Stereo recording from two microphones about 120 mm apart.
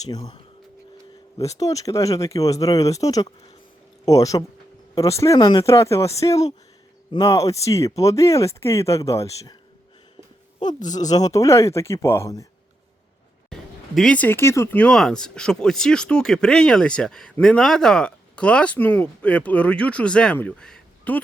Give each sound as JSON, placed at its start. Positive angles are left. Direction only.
{"t": 1.4, "sound": "speech", "side_deg": 30}
{"t": 5.4, "sound": "speech", "side_deg": 35}
{"t": 5.6, "sound": "speech", "side_deg": 25}
{"t": 10.9, "sound": "speech", "side_deg": 30}
{"t": 13.5, "sound": "speech", "side_deg": 5}
{"t": 14.8, "sound": "speech", "side_deg": 5}